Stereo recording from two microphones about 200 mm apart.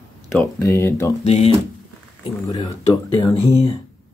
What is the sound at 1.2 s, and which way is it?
Speech, 30° left (ahead or behind).